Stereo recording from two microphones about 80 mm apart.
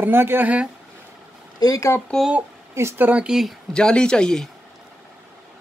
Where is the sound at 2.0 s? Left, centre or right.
Centre.